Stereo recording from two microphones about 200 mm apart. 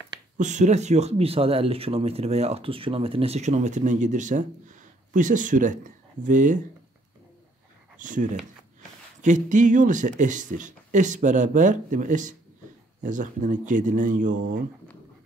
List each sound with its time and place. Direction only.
0.4 s speech: 35° right (ahead or behind)
8.0 s speech: 40° right (ahead or behind)